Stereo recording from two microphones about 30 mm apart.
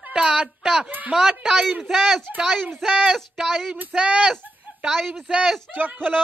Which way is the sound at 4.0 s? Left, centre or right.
Right.